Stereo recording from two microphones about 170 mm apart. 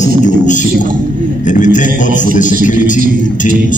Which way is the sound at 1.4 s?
45° left (ahead or behind).